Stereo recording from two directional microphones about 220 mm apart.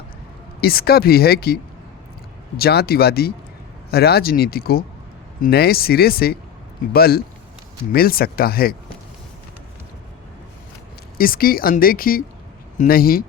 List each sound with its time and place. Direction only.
0.6 s speech: 45° left (ahead or behind)
2.6 s speech: 45° left (ahead or behind)
11.2 s speech: 40° left (ahead or behind)